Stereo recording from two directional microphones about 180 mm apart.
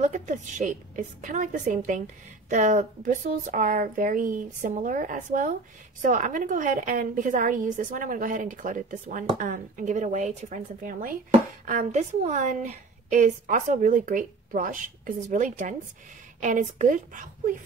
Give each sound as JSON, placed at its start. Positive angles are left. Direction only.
{"t": 0.0, "sound": "speech", "side_deg": -45}